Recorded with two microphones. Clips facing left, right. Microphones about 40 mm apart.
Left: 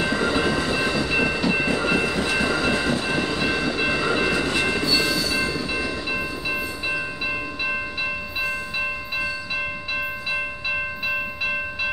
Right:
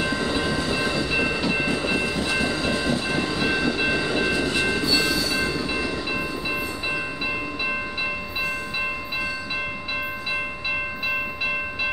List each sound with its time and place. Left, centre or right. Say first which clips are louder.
0.0 s train: left 3 dB; left
1.0 s train: left 2 dB; centre
1.7 s train: left 2 dB; left
3.1 s train: left 1 dB; left
3.3 s train: even; centre
4.0 s train: left 2 dB; left
4.3 s train: left 1 dB; left
4.8 s train: even; centre
10.7 s train: even; centre